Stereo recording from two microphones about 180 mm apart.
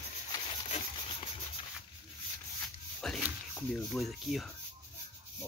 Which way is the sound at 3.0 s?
5° left (ahead or behind).